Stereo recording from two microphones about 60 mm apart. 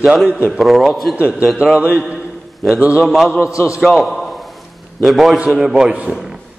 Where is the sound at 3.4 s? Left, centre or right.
Left.